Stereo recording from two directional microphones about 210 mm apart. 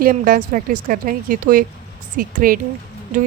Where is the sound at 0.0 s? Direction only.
40° right (ahead or behind).